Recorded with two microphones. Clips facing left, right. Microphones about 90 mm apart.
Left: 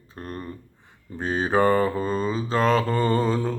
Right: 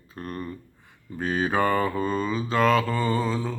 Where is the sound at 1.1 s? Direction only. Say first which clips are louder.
Left 2 dB; 30° left (ahead or behind).